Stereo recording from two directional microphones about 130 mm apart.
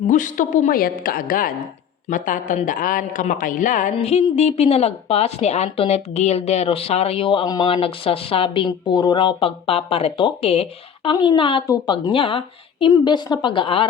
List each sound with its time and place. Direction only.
0.1 s a woman's voice: 85° left
3.9 s speech: 50° left (ahead or behind); by 7.7 s 35° left (ahead or behind)
7.7 s speech: 45° left (ahead or behind)
11.6 s speech: 30° left (ahead or behind)